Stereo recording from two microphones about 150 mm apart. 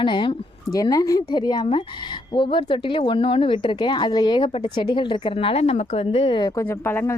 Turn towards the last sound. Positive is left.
turn(degrees=15)  # may be behind; listen again after turning